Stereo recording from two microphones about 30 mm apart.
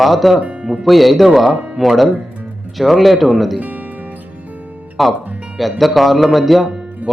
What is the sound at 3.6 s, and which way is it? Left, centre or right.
Music, right.